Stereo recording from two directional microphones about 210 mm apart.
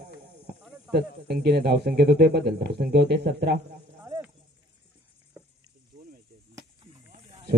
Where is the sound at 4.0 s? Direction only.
10° right (ahead or behind).